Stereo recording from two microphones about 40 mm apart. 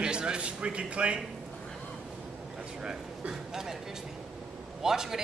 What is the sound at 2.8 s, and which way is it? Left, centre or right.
Speech, centre.